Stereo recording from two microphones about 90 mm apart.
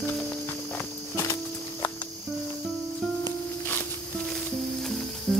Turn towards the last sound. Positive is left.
turn(degrees=10)  # may be behind; listen again after turning